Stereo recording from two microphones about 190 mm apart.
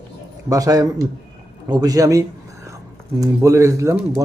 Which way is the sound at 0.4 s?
15° right (ahead or behind).